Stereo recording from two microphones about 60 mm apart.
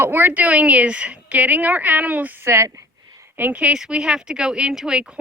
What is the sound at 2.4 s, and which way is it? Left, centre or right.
Speech, right.